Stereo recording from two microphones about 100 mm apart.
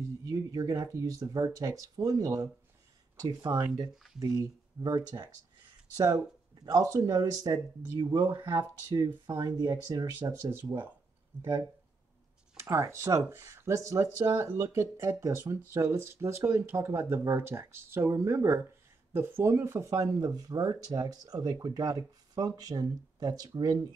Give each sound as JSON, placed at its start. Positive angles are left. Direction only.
{"t": 0.2, "sound": "speech", "side_deg": -40}
{"t": 3.9, "sound": "speech", "side_deg": -5}
{"t": 4.2, "sound": "speech", "side_deg": -35}
{"t": 8.4, "sound": "speech", "side_deg": -25}
{"t": 8.9, "sound": "speech", "side_deg": -40}
{"t": 10.1, "sound": "speech", "side_deg": -25}
{"t": 12.5, "sound": "speech", "side_deg": -25}